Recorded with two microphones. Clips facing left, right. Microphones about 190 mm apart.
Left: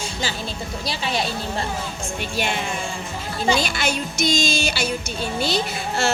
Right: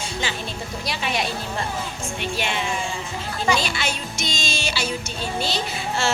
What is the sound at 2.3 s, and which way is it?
Speech, 45° left (ahead or behind).